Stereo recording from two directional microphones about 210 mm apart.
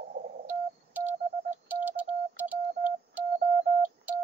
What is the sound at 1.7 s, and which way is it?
Telephone dialing, 5° right (ahead or behind).